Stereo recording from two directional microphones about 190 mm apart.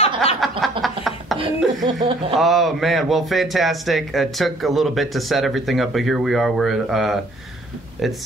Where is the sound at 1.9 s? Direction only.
40° right (ahead or behind).